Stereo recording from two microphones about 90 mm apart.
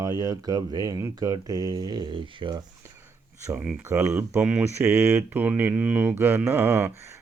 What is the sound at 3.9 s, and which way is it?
Humming, 20° right (ahead or behind).